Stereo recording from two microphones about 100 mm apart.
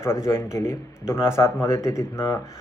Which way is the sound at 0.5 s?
25° left (ahead or behind).